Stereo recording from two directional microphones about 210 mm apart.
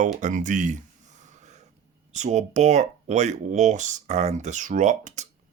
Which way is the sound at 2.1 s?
35° right (ahead or behind).